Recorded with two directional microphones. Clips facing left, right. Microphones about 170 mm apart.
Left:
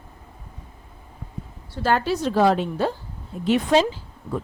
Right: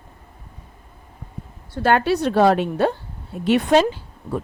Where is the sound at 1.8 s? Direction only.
65° right (ahead or behind).